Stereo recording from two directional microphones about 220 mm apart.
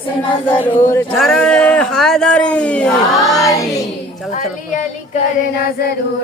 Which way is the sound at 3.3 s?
15° left (ahead or behind).